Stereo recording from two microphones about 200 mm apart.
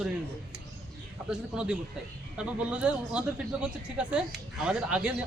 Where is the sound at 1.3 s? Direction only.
5° right (ahead or behind).